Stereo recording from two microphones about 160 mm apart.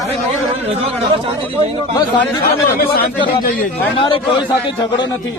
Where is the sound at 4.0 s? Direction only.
35° left (ahead or behind).